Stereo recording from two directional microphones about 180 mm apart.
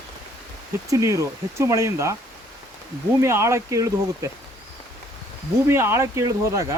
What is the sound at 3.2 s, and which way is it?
Speech, 15° right (ahead or behind).